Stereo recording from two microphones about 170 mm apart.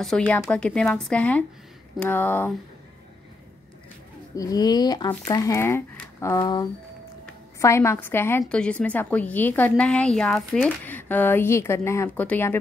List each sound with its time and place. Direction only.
0.0 s a woman's voice: 5° left (ahead or behind)
4.4 s a woman's voice: 20° left (ahead or behind)